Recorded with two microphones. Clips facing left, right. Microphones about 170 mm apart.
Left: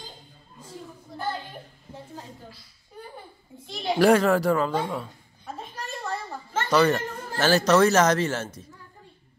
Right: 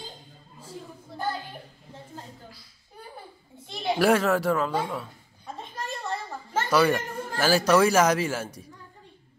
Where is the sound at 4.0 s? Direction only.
5° right (ahead or behind).